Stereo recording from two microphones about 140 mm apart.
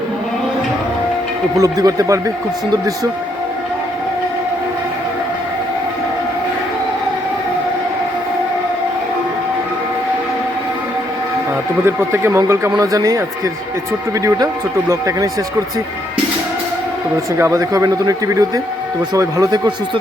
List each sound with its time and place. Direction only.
1.5 s a man's voice: 25° right (ahead or behind)
11.9 s a man's voice: 15° right (ahead or behind)
17.3 s a man's voice: 20° right (ahead or behind)